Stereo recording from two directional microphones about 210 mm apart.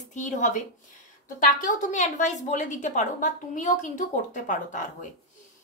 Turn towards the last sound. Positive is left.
turn(degrees=35)  # may be behind; listen again after turning